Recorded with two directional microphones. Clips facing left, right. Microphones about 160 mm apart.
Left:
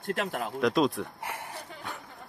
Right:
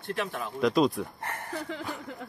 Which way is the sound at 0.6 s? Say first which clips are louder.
Right 2 dB; centre (ahead or behind).